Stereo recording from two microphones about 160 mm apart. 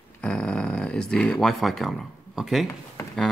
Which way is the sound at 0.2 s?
5° left (ahead or behind).